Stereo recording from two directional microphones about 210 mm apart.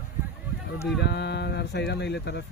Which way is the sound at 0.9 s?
55° left (ahead or behind).